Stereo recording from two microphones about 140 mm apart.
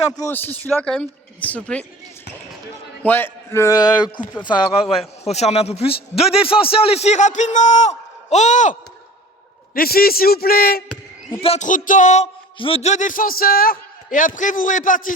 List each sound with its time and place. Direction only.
0.2 s a woman's voice: 15° left (ahead or behind)
3.0 s a man's voice: 15° left (ahead or behind)
5.2 s a man's voice: 50° left (ahead or behind)
9.7 s a man's voice: 90° left
11.6 s music: 65° left (ahead or behind)
12.5 s a man's voice: 40° left (ahead or behind); by 15.1 s 70° left (ahead or behind)